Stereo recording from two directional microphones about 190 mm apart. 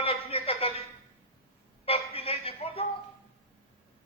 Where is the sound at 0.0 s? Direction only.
30° left (ahead or behind).